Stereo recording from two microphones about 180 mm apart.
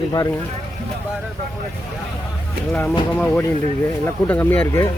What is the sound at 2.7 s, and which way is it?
Speech, 10° left (ahead or behind).